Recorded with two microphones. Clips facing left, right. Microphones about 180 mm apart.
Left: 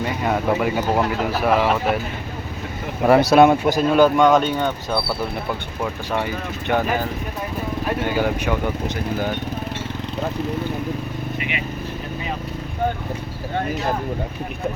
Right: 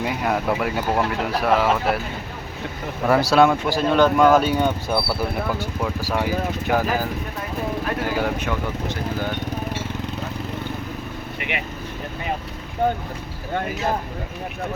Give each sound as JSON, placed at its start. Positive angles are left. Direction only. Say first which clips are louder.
{"t": 0.0, "sound": "speech", "louder": "left 1 dB", "side_deg": -5}
{"t": 3.1, "sound": "a man's voice", "louder": "left 3 dB", "side_deg": 20}
{"t": 3.8, "sound": "speech", "louder": "left 2 dB", "side_deg": 10}
{"t": 4.2, "sound": "speech", "louder": "even", "side_deg": -5}